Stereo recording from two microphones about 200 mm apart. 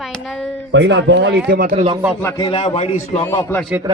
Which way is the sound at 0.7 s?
60° right (ahead or behind).